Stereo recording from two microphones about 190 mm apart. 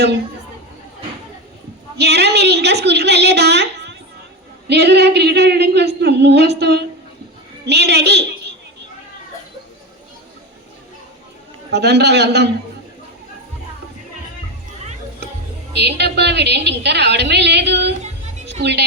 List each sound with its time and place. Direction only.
2.0 s a woman's voice: 60° right (ahead or behind)
11.7 s a woman's voice: 60° right (ahead or behind)
15.7 s a woman's voice: 60° right (ahead or behind)
18.4 s music: 65° right (ahead or behind)